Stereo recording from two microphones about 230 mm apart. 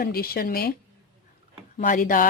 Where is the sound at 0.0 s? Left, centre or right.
Left.